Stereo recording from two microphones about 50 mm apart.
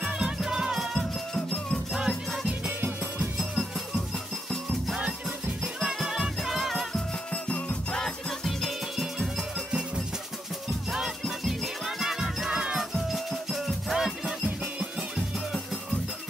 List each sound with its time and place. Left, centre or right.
0.0 s music: centre
1.3 s music: centre
2.0 s music: centre
5.8 s music: centre
7.4 s music: left
7.9 s music: centre
9.7 s music: centre
10.9 s music: centre